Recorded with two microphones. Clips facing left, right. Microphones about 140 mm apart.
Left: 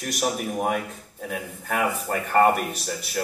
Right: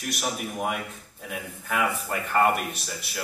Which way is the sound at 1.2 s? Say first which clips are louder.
Left 3 dB; 40° left (ahead or behind).